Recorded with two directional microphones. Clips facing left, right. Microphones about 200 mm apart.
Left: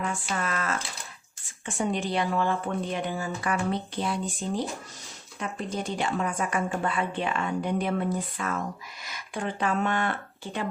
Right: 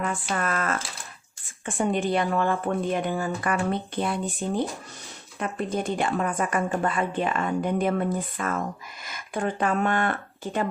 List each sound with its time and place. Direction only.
0.3 s speech: 50° right (ahead or behind)